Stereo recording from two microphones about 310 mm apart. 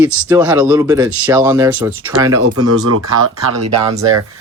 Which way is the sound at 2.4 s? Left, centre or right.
Right.